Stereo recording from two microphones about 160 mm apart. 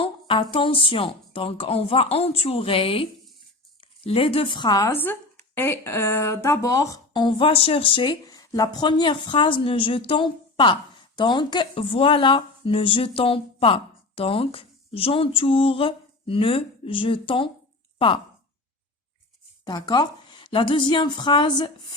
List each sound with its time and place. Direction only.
0.0 s speech: 35° left (ahead or behind)
19.6 s speech: 25° left (ahead or behind)